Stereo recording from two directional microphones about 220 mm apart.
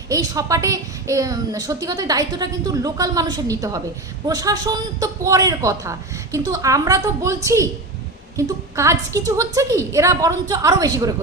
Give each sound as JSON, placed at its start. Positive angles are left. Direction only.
{"t": 0.1, "sound": "a woman's voice", "side_deg": -15}